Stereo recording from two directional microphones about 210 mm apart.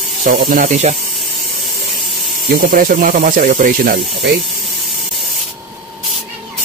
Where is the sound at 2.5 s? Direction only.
40° right (ahead or behind).